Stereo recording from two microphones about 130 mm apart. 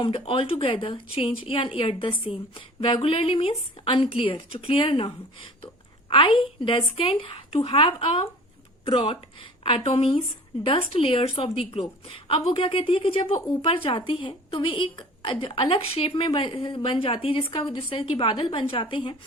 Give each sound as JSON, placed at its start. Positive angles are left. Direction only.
{"t": 0.0, "sound": "a woman's voice", "side_deg": 45}